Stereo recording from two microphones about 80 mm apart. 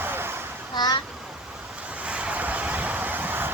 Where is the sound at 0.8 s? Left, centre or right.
Left.